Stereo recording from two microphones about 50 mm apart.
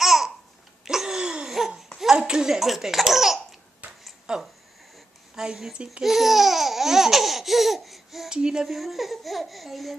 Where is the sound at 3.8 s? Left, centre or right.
Right.